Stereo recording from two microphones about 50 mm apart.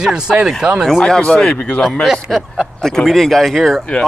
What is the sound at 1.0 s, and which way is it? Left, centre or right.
Speech, centre.